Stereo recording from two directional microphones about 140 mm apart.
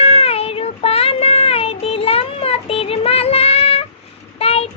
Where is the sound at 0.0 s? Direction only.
45° left (ahead or behind).